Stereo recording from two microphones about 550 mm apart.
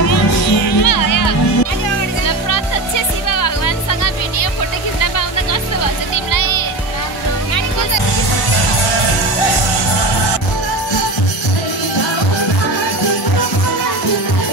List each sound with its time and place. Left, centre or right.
0.1 s music: left
3.3 s music: left